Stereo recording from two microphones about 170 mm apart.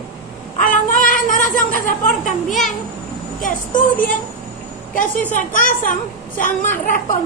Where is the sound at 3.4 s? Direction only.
50° left (ahead or behind).